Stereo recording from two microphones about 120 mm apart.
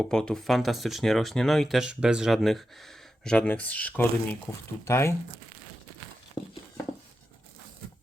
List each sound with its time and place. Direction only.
0.0 s speech: 5° left (ahead or behind); by 5.1 s 25° left (ahead or behind)